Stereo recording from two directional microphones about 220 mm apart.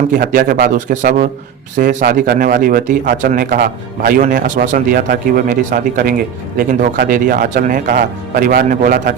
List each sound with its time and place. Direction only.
0.1 s a man's voice: 40° right (ahead or behind)